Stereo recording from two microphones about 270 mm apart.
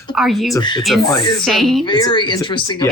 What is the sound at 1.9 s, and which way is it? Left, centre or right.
Speech, centre.